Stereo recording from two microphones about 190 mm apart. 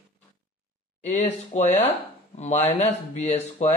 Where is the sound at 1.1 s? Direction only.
35° left (ahead or behind).